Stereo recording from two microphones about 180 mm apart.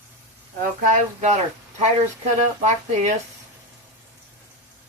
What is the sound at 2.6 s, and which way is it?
Speech, 40° right (ahead or behind).